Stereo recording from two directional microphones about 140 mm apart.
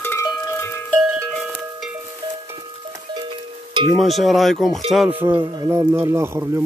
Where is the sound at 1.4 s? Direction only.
10° right (ahead or behind).